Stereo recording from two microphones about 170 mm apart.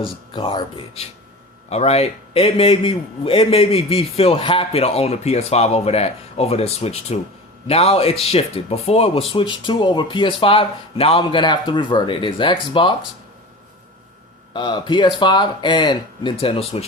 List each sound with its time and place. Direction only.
0.0 s a man's voice: 30° left (ahead or behind)
14.5 s speech: 30° left (ahead or behind)